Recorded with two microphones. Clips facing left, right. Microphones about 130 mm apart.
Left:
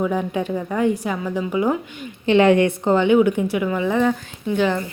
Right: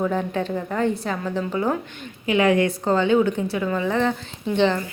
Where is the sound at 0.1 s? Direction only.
10° left (ahead or behind).